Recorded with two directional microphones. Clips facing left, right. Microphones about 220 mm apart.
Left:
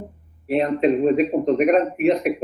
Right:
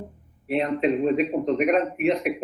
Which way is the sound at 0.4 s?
40° left (ahead or behind).